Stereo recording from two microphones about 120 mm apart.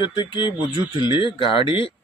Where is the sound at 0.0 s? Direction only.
40° left (ahead or behind).